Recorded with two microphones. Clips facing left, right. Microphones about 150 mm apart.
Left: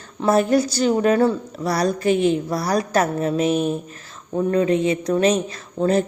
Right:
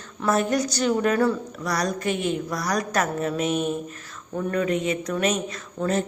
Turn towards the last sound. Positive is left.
turn(degrees=30)  # may be behind; listen again after turning